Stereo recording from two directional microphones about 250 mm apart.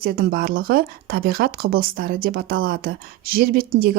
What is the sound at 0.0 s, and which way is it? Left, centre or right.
Speech, right.